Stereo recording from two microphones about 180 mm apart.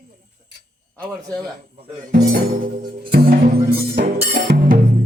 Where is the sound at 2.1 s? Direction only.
60° right (ahead or behind).